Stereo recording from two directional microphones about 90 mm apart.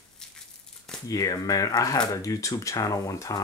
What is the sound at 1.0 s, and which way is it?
Speech, 40° left (ahead or behind).